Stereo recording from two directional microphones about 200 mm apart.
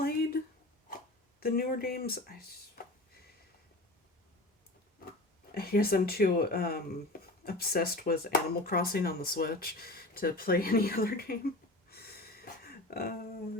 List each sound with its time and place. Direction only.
0.0 s a sound: 50° left (ahead or behind)
1.4 s speech: 50° left (ahead or behind)
5.5 s speech: 50° left (ahead or behind)